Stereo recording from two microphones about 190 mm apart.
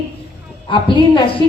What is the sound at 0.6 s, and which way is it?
Speech, 25° left (ahead or behind).